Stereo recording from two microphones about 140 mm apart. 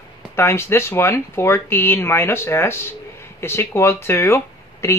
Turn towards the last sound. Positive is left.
turn(degrees=20)  # may be behind; listen again after turning